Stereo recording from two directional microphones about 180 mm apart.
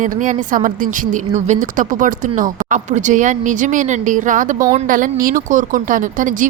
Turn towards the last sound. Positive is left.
turn(degrees=-45)  # may be behind; listen again after turning